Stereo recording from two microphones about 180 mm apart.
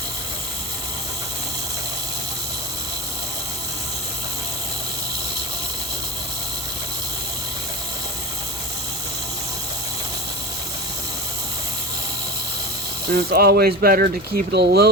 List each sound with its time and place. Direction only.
13.1 s speech: 60° right (ahead or behind)